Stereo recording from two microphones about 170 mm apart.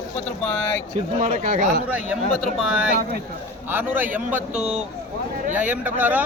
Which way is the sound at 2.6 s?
5° right (ahead or behind).